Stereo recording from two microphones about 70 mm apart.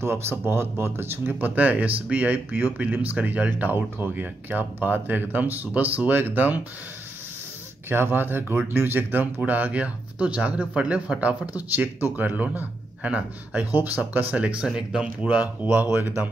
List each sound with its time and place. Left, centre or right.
0.0 s speech: right
7.9 s a man's voice: right; by 15.0 s centre
15.2 s speech: right